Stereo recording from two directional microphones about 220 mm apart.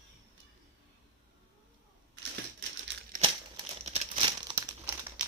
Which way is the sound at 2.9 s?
55° right (ahead or behind).